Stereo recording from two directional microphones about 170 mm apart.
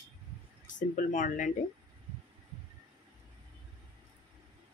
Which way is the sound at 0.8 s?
50° left (ahead or behind).